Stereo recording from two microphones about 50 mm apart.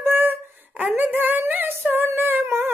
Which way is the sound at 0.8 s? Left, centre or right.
Right.